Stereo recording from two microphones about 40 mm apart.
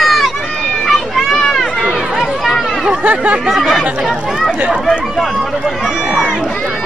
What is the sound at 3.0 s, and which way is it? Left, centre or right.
Speech, right.